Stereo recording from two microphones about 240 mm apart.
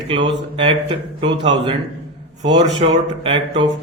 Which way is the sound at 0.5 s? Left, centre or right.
Right.